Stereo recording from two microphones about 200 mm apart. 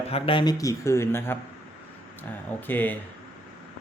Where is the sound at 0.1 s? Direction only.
25° left (ahead or behind).